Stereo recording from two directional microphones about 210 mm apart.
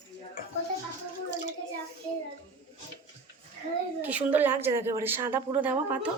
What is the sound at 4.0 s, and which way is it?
Speech, 5° right (ahead or behind).